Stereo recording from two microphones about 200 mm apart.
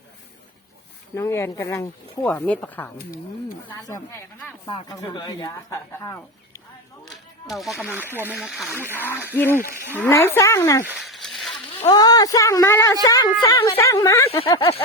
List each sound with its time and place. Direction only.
1.1 s speech: 15° left (ahead or behind)
7.4 s speech: centre (ahead or behind)
9.0 s speech: 10° left (ahead or behind)
10.8 s a sound: centre (ahead or behind)
11.9 s speech: 20° left (ahead or behind)
14.3 s speech: 30° left (ahead or behind)